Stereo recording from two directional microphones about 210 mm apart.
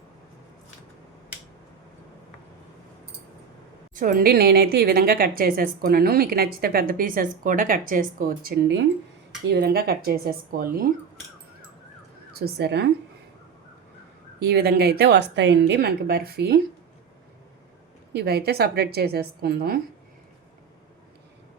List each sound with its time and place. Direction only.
3.9 s a woman's voice: 40° right (ahead or behind)
12.4 s a woman's voice: 50° right (ahead or behind)
14.3 s a woman's voice: 50° right (ahead or behind)
18.1 s a woman's voice: 50° right (ahead or behind)